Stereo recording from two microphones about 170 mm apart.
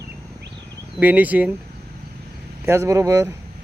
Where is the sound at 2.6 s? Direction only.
15° right (ahead or behind).